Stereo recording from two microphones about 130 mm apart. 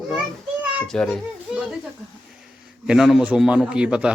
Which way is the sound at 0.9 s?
5° left (ahead or behind).